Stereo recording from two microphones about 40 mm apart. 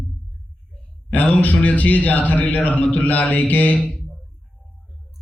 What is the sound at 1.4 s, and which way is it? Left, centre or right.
Speech, left.